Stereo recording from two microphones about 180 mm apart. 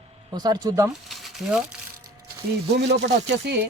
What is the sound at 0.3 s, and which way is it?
Speech, 25° right (ahead or behind).